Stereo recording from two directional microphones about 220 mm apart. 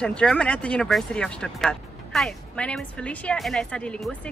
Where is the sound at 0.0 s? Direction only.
5° left (ahead or behind).